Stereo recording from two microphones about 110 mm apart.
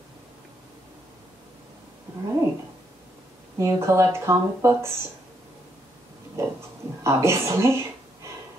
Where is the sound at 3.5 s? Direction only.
25° right (ahead or behind).